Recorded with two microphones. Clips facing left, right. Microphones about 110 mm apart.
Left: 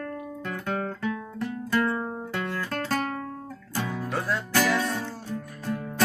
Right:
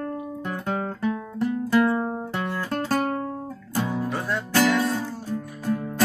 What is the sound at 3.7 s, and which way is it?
Music, 20° right (ahead or behind).